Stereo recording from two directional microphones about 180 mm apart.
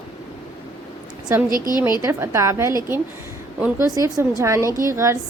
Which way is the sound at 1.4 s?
50° right (ahead or behind).